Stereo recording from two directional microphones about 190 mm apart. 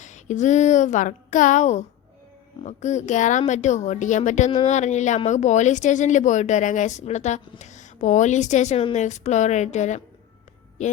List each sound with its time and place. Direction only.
0.0 s a woman's voice: 40° left (ahead or behind)